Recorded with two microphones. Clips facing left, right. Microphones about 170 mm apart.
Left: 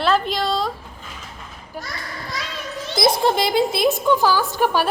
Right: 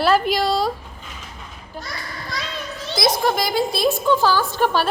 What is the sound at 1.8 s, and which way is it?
Speech, 10° left (ahead or behind).